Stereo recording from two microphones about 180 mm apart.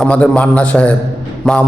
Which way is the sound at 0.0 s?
5° left (ahead or behind).